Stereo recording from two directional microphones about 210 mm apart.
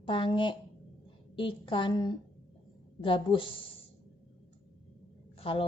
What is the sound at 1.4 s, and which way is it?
A woman's voice, 25° left (ahead or behind).